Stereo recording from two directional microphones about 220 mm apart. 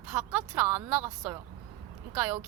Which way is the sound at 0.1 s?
10° right (ahead or behind).